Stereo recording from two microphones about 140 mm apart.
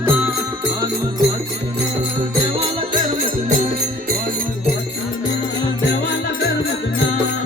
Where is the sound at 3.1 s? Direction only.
80° right.